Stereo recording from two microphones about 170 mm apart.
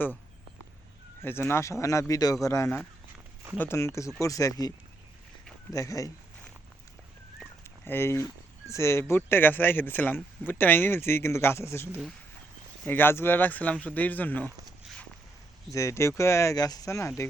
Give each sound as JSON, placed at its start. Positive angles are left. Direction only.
{"t": 1.2, "sound": "speech", "side_deg": 15}
{"t": 5.7, "sound": "speech", "side_deg": 20}
{"t": 7.9, "sound": "speech", "side_deg": 15}
{"t": 15.7, "sound": "speech", "side_deg": 15}